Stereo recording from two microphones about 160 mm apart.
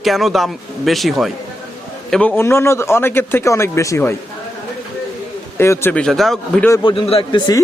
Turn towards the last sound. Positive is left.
turn(degrees=25)  # may be behind; listen again after turning